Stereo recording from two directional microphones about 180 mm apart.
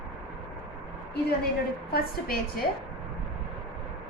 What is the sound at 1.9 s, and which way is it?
Speech, 55° left (ahead or behind).